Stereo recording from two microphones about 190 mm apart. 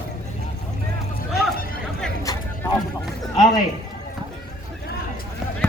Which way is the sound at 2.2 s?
20° left (ahead or behind).